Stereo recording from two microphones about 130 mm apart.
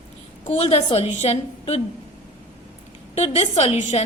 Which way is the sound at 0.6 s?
55° left (ahead or behind).